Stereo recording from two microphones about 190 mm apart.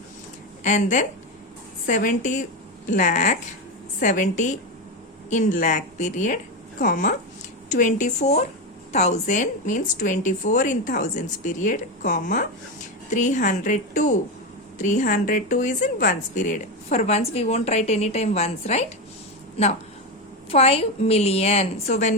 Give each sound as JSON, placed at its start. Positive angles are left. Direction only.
{"t": 0.6, "sound": "a woman's voice", "side_deg": 40}